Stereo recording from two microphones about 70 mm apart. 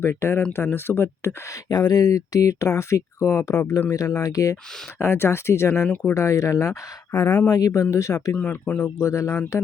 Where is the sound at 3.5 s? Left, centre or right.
Left.